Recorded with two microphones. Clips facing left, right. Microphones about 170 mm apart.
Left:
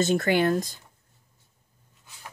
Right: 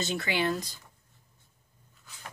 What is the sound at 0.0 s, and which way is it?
Speech, 50° left (ahead or behind).